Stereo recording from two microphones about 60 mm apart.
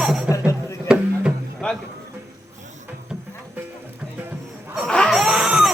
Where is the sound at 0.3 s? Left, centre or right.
Left.